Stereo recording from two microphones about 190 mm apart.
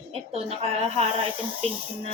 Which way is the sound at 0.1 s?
30° right (ahead or behind).